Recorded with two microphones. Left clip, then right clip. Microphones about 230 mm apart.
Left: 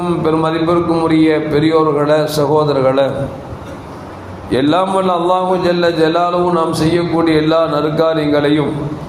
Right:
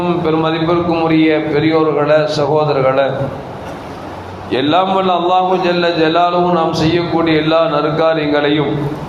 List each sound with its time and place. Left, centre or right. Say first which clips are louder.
0.2 s a man's voice: even; left
4.5 s a man's voice: even; left